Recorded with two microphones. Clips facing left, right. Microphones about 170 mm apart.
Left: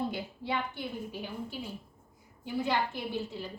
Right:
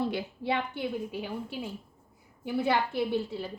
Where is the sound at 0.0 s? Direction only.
70° right (ahead or behind).